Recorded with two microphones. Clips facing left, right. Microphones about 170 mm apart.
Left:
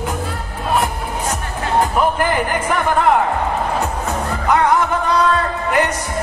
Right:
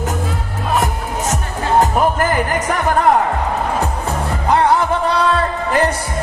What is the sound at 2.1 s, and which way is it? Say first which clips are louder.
Music: right 1 dB; 45° right (ahead or behind).